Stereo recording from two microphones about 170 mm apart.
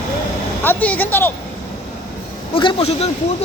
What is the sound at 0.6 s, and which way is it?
Speech, 10° left (ahead or behind).